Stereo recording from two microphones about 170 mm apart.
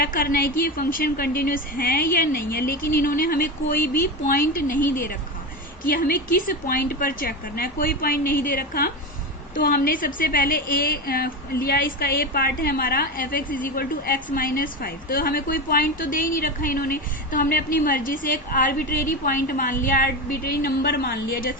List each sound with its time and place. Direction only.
0.0 s a woman's voice: 55° left (ahead or behind)